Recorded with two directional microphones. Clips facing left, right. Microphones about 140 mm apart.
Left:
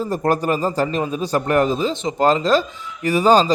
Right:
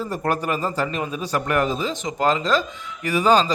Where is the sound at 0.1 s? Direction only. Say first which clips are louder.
Left 5 dB; 35° left (ahead or behind).